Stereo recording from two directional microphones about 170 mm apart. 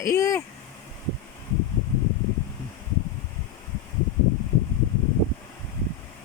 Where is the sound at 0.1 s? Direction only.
15° left (ahead or behind).